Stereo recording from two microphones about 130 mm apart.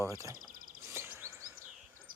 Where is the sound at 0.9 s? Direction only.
20° right (ahead or behind).